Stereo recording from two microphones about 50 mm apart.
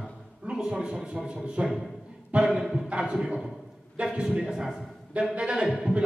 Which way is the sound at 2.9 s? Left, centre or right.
Right.